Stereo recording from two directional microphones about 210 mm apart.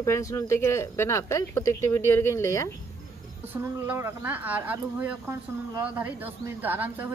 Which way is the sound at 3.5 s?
10° right (ahead or behind).